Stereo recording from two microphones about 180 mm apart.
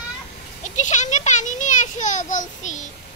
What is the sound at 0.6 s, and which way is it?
A child's voice, 40° left (ahead or behind).